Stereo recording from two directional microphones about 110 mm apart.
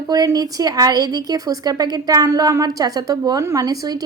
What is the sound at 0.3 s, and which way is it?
Speech, 35° right (ahead or behind).